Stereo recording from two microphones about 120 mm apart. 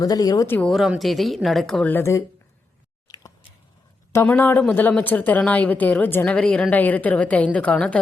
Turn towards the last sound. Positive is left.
turn(degrees=10)  # may be behind; listen again after turning